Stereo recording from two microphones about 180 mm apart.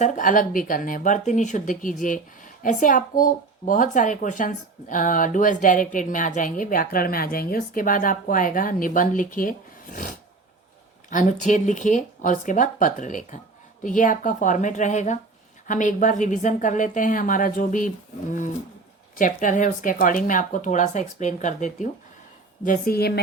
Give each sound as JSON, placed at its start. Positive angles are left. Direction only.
{"t": 0.0, "sound": "a woman's voice", "side_deg": 45}